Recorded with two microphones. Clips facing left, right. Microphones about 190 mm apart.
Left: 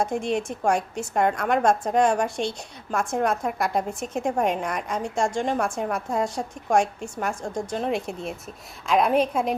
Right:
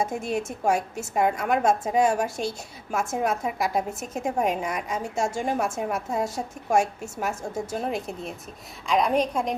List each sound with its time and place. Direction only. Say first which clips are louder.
0.0 s a woman's voice: left 2 dB; 5° right (ahead or behind)